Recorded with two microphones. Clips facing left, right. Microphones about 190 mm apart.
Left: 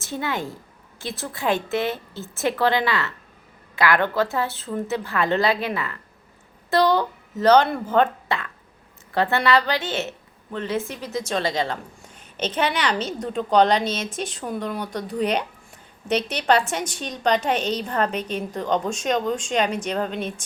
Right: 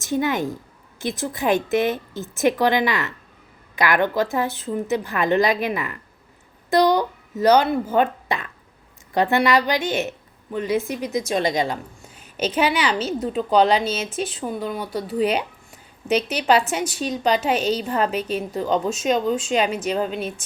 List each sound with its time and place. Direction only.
0.0 s a woman's voice: 15° right (ahead or behind)